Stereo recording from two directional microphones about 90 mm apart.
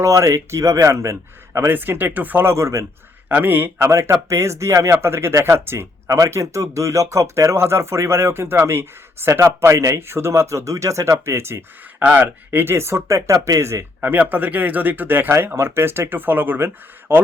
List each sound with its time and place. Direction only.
0.0 s speech: 35° right (ahead or behind)
1.5 s speech: 25° right (ahead or behind)
3.2 s speech: 20° right (ahead or behind)